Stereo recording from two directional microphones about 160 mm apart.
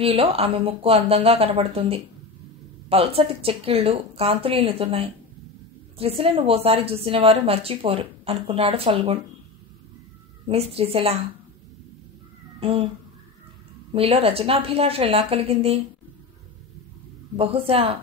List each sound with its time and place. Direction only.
0.0 s a woman's voice: 35° right (ahead or behind)
10.4 s a woman's voice: 40° right (ahead or behind)
12.5 s speech: 35° right (ahead or behind)
13.9 s a woman's voice: 35° right (ahead or behind)
17.4 s a woman's voice: 35° right (ahead or behind)